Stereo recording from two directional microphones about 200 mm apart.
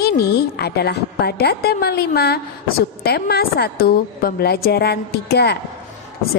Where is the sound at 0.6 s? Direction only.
55° left (ahead or behind).